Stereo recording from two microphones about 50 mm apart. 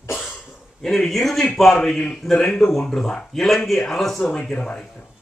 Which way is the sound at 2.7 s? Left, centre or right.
Centre.